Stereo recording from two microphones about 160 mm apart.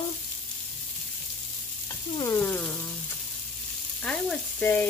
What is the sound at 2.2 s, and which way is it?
Sizzle, 15° left (ahead or behind).